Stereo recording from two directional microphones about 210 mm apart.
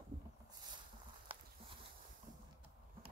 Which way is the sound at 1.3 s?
25° right (ahead or behind).